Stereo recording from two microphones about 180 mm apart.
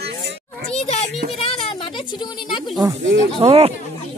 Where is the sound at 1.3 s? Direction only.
30° left (ahead or behind).